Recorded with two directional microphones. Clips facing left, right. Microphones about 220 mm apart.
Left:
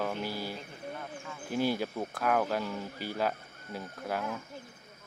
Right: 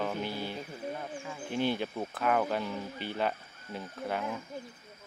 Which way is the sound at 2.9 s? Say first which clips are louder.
Even; 40° left (ahead or behind).